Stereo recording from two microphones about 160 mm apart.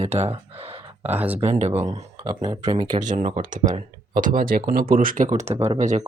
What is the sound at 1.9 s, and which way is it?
Speech, 25° right (ahead or behind).